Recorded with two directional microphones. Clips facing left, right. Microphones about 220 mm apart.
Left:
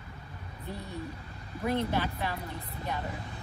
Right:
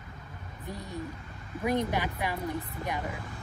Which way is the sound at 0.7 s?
15° right (ahead or behind).